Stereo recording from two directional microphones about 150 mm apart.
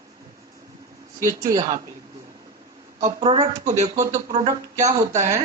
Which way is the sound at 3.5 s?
50° right (ahead or behind).